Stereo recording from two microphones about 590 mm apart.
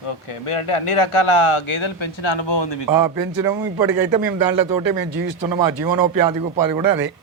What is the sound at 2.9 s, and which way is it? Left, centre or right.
Speech, right.